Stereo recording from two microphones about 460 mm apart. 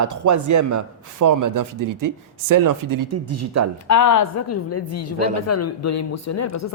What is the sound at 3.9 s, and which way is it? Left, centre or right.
A woman's voice, left.